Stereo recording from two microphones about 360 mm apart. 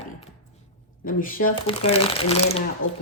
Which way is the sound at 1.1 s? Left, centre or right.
Left.